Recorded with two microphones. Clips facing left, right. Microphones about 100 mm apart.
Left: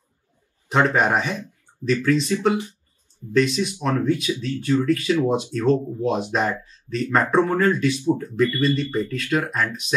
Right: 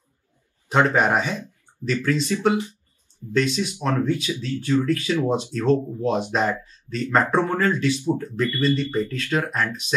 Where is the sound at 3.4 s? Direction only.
5° left (ahead or behind).